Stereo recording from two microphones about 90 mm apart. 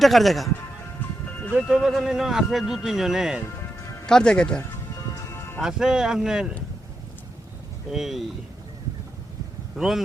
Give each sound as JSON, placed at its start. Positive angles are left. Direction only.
{"t": 0.0, "sound": "speech", "side_deg": 0}
{"t": 1.2, "sound": "music", "side_deg": 15}
{"t": 1.6, "sound": "speech", "side_deg": 0}
{"t": 3.4, "sound": "music", "side_deg": 30}
{"t": 4.0, "sound": "speech", "side_deg": 10}
{"t": 4.9, "sound": "music", "side_deg": 35}
{"t": 5.6, "sound": "speech", "side_deg": -5}
{"t": 7.9, "sound": "speech", "side_deg": -5}
{"t": 9.7, "sound": "speech", "side_deg": -5}